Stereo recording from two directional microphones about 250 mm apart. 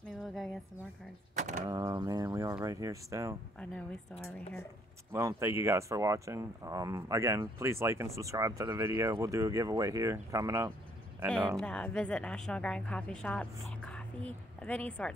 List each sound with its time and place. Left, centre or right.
0.2 s a sound: centre
1.7 s speech: centre
5.1 s speech: centre
11.6 s a woman's voice: centre